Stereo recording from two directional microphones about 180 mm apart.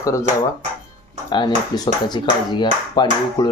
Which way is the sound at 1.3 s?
25° left (ahead or behind).